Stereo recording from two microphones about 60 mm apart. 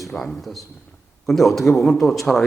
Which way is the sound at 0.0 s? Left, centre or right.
Centre.